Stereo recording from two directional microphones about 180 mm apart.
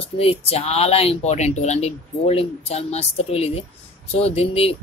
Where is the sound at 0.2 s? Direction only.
35° left (ahead or behind).